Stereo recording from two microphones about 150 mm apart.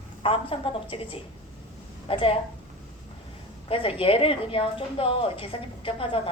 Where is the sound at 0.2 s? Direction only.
35° left (ahead or behind).